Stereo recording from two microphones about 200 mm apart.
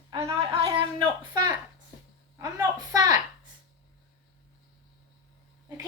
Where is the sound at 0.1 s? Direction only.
15° right (ahead or behind).